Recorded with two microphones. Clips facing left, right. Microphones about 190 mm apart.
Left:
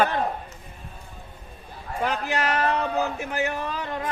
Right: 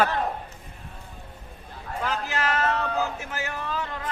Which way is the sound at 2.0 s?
20° left (ahead or behind).